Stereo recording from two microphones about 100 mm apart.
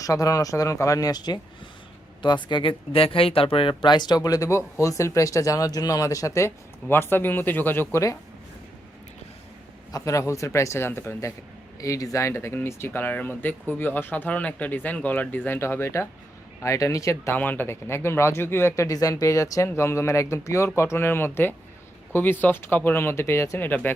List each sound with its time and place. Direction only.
0.0 s speech: 35° left (ahead or behind)
2.9 s speech: 70° left (ahead or behind); by 7.9 s 20° left (ahead or behind)
7.9 s speech: 30° left (ahead or behind)
9.9 s speech: 35° left (ahead or behind)
11.8 s speech: 35° left (ahead or behind)
17.3 s speech: 20° left (ahead or behind)